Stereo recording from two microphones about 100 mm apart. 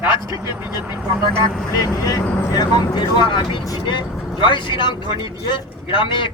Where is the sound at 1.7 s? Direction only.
35° left (ahead or behind); by 6.3 s 55° left (ahead or behind).